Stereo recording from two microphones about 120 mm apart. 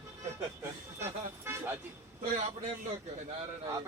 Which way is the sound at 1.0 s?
20° right (ahead or behind).